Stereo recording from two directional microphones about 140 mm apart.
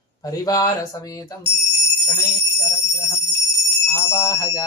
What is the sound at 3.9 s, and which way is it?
Speech, 20° left (ahead or behind).